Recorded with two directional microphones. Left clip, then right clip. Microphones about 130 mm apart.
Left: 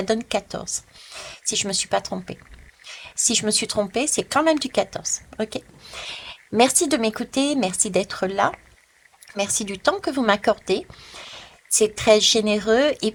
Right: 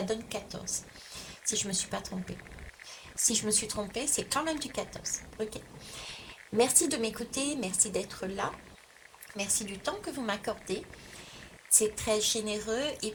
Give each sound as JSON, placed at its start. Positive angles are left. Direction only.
{"t": 0.0, "sound": "a woman's voice", "side_deg": 60}
{"t": 5.8, "sound": "speech", "side_deg": 80}
{"t": 9.3, "sound": "speech", "side_deg": 65}